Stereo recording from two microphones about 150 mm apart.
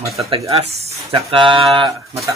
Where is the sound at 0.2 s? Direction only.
40° right (ahead or behind).